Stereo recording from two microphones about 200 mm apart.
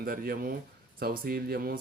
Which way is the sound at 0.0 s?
50° right (ahead or behind).